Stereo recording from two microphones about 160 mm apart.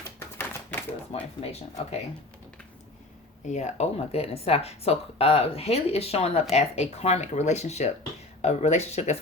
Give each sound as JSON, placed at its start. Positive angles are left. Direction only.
{"t": 0.0, "sound": "typewriter", "side_deg": 15}
{"t": 1.1, "sound": "speech", "side_deg": 40}
{"t": 3.4, "sound": "speech", "side_deg": 50}